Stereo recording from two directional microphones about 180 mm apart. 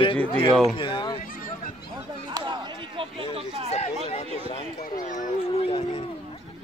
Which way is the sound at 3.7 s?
35° left (ahead or behind).